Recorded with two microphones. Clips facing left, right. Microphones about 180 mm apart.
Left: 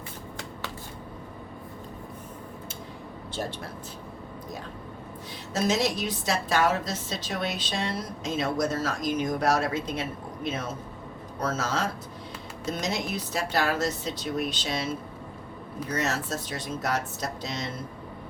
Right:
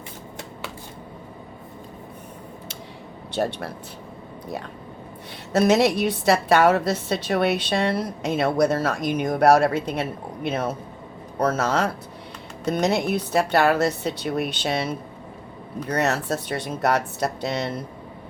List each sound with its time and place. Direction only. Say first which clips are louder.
3.3 s speech: right 9 dB; 70° right (ahead or behind)
5.5 s a woman's voice: right 8 dB; 65° right (ahead or behind)
15.9 s a woman's voice: right 6 dB; 60° right (ahead or behind)